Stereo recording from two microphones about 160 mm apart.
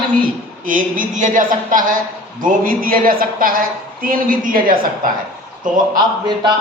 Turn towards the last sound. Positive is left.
turn(degrees=-25)  # may be behind; listen again after turning